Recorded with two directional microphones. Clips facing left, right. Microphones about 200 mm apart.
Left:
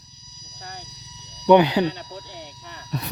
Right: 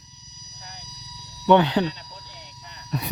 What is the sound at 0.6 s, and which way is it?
Vehicle, 55° left (ahead or behind).